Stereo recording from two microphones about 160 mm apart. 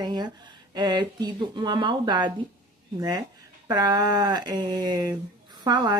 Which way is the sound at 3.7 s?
25° right (ahead or behind).